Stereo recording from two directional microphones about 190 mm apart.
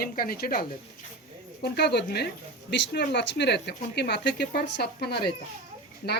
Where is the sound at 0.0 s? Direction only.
50° left (ahead or behind).